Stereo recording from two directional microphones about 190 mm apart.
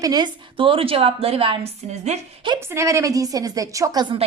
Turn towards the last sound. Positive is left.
turn(degrees=-25)  # may be behind; listen again after turning